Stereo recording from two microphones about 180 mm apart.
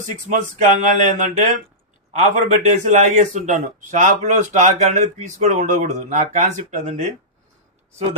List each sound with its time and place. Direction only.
0.8 s a man's voice: 45° right (ahead or behind)